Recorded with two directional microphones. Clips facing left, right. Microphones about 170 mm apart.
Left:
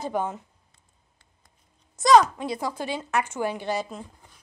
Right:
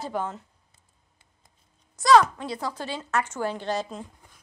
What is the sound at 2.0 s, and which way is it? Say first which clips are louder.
A woman's voice: left 1 dB; 20° left (ahead or behind).